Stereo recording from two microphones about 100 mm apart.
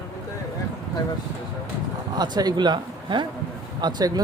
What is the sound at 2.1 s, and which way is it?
Speech, 45° right (ahead or behind).